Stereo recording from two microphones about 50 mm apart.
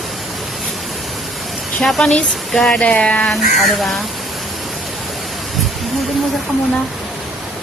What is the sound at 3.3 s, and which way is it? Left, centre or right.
Speech, centre.